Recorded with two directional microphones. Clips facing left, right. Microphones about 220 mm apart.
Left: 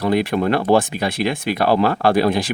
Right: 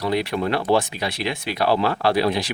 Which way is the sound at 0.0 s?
50° left (ahead or behind).